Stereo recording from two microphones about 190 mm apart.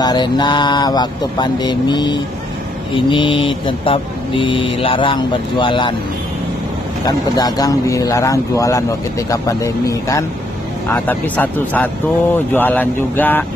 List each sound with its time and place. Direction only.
0.0 s mantra: 20° left (ahead or behind)
7.1 s speech: 20° left (ahead or behind)